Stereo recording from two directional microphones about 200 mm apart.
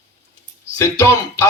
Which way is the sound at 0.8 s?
15° left (ahead or behind).